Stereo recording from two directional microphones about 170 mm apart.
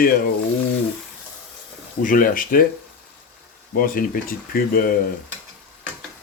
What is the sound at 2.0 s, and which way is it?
Speech, 55° left (ahead or behind).